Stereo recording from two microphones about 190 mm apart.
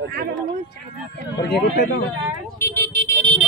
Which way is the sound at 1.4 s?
60° left (ahead or behind).